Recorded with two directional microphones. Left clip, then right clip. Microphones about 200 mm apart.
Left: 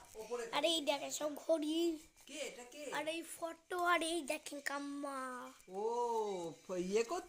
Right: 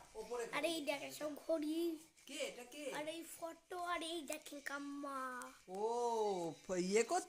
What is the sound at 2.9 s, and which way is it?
Speech, 25° left (ahead or behind).